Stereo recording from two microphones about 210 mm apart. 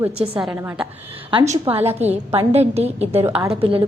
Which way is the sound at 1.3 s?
30° right (ahead or behind).